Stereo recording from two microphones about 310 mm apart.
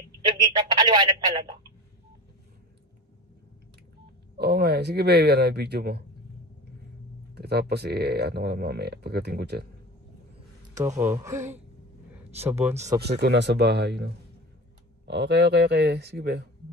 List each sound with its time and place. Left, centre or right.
0.3 s speech: centre
4.4 s speech: right
7.3 s speech: right
11.0 s speech: centre
12.1 s a sound: centre
13.0 s speech: right